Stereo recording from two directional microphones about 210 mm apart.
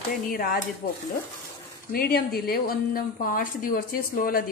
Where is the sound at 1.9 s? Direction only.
45° left (ahead or behind).